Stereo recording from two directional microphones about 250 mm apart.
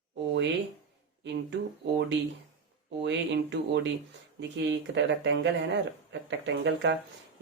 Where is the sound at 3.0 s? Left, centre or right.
Right.